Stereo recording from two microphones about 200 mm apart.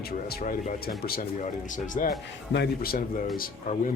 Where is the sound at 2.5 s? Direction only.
55° left (ahead or behind).